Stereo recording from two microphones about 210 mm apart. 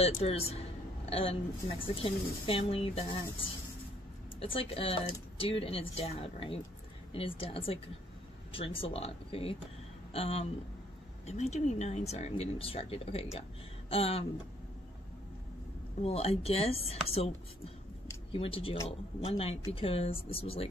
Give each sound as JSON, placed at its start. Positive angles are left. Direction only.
{"t": 0.0, "sound": "speech", "side_deg": 30}
{"t": 16.0, "sound": "speech", "side_deg": 30}
{"t": 18.3, "sound": "speech", "side_deg": 25}